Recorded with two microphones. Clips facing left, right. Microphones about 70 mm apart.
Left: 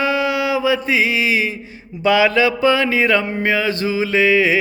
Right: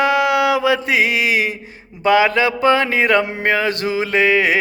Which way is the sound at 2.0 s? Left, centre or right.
Right.